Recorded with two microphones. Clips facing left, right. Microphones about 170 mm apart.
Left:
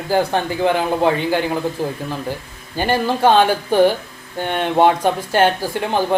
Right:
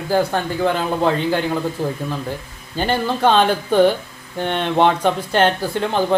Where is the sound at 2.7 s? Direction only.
10° left (ahead or behind).